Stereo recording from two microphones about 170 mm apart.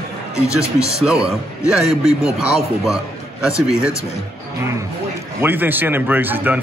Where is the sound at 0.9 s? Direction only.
5° right (ahead or behind).